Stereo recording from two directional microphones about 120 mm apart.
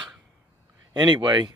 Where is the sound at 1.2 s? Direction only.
30° right (ahead or behind).